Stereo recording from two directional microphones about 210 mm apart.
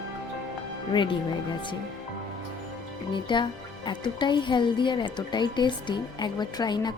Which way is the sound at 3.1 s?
20° left (ahead or behind).